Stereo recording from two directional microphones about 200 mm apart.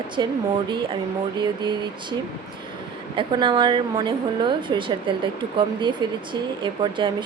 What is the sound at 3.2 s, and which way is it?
A woman's voice, 25° right (ahead or behind).